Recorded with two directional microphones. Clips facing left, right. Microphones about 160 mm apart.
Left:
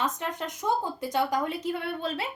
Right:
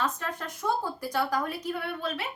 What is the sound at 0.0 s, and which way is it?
A woman's voice, 20° left (ahead or behind).